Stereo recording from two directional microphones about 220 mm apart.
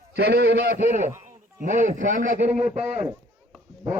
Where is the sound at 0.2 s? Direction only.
50° right (ahead or behind).